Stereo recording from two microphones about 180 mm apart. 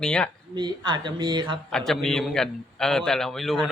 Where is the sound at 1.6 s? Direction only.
Centre (ahead or behind).